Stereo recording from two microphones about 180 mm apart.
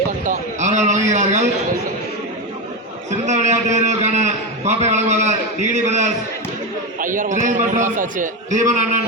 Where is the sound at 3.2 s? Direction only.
40° right (ahead or behind).